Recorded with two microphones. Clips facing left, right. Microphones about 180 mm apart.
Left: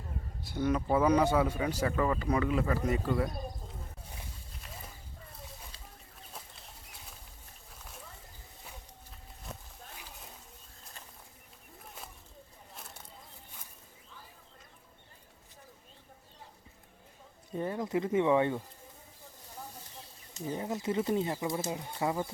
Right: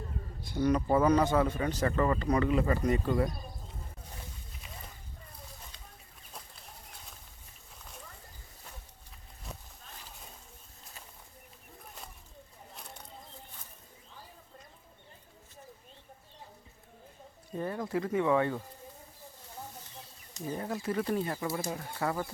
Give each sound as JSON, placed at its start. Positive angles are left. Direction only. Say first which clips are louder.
{"t": 0.6, "sound": "speech", "louder": "right 2 dB", "side_deg": 5}
{"t": 17.6, "sound": "speech", "louder": "left 1 dB", "side_deg": 20}
{"t": 20.4, "sound": "speech", "louder": "left 1 dB", "side_deg": 20}